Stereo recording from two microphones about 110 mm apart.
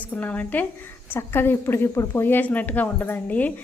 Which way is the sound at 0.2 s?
15° left (ahead or behind).